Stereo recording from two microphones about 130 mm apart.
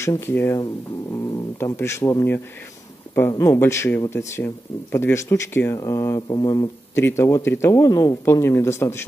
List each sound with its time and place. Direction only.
0.0 s speech: 20° left (ahead or behind)